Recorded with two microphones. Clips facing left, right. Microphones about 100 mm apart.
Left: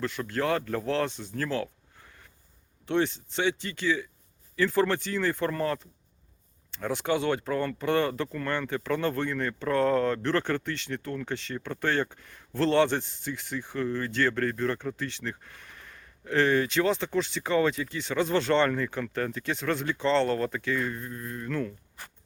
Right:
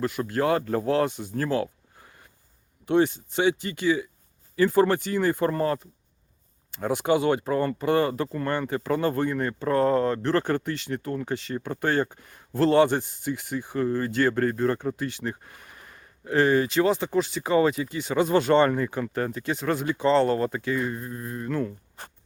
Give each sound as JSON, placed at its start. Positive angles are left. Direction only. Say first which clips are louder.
{"t": 0.3, "sound": "speech", "louder": "right 4 dB", "side_deg": -10}
{"t": 0.6, "sound": "speech", "louder": "right 5 dB", "side_deg": -25}
{"t": 0.9, "sound": "speech", "louder": "right 5 dB", "side_deg": -10}
{"t": 2.8, "sound": "speech", "louder": "right 5 dB", "side_deg": -10}
{"t": 6.7, "sound": "speech", "louder": "right 5 dB", "side_deg": -10}
{"t": 8.3, "sound": "speech", "louder": "right 4 dB", "side_deg": -30}
{"t": 8.5, "sound": "speech", "louder": "right 3 dB", "side_deg": -5}
{"t": 9.7, "sound": "speech", "louder": "right 2 dB", "side_deg": -35}
{"t": 10.6, "sound": "speech", "louder": "right 4 dB", "side_deg": -5}
{"t": 14.3, "sound": "speech", "louder": "right 4 dB", "side_deg": -30}
{"t": 14.9, "sound": "speech", "louder": "right 4 dB", "side_deg": -10}